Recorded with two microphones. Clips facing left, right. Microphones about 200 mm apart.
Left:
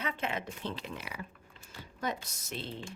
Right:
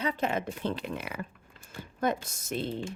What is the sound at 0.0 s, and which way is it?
A woman's voice, 40° right (ahead or behind).